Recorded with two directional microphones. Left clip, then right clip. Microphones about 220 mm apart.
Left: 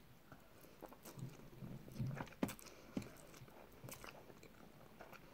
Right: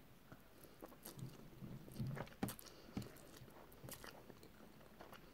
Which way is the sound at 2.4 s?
15° right (ahead or behind).